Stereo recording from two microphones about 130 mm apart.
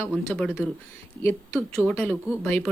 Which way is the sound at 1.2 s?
20° left (ahead or behind).